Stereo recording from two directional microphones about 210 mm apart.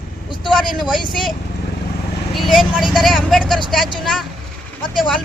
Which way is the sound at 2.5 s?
Centre (ahead or behind).